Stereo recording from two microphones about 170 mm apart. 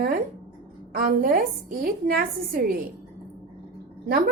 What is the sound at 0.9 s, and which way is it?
A woman's voice, 60° right (ahead or behind).